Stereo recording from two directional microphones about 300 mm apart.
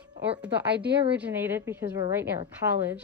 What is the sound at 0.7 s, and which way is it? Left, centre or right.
Speech, right.